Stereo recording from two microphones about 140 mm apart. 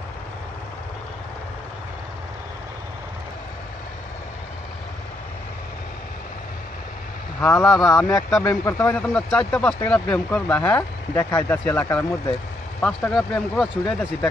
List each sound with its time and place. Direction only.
7.3 s speech: 20° left (ahead or behind)
7.8 s speech: 5° left (ahead or behind)